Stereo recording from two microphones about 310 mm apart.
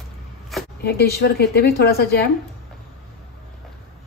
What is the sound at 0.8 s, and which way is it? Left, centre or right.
A woman's voice, left.